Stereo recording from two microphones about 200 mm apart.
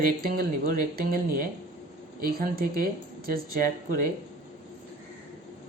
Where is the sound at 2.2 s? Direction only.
50° right (ahead or behind).